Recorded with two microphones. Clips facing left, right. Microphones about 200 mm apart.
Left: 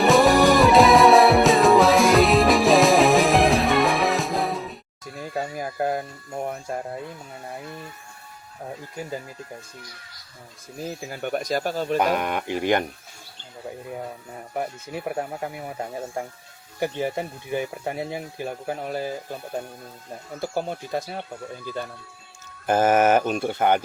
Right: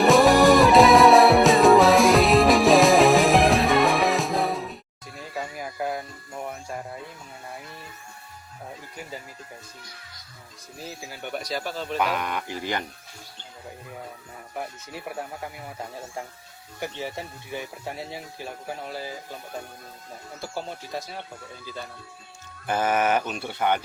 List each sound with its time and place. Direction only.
0.0 s music: centre (ahead or behind)
5.4 s music: 45° left (ahead or behind)
10.8 s speech: 50° left (ahead or behind)
15.1 s speech: 55° left (ahead or behind)
16.8 s speech: 55° left (ahead or behind)
20.4 s speech: 50° left (ahead or behind)
22.6 s speech: 45° left (ahead or behind)